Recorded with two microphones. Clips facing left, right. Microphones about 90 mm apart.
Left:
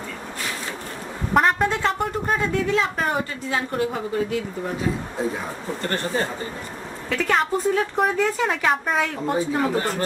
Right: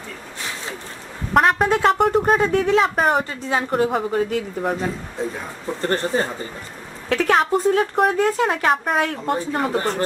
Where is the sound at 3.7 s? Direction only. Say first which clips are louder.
Right 7 dB; 50° right (ahead or behind).